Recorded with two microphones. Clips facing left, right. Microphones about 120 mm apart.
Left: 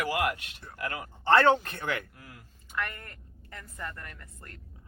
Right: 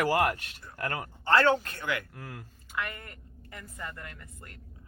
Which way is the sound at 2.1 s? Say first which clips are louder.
Right 7 dB; 55° right (ahead or behind).